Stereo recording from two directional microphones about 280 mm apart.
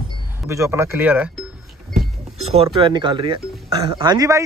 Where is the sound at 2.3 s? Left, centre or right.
Right.